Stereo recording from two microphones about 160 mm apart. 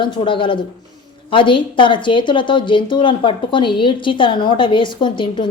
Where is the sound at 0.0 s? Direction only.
30° left (ahead or behind).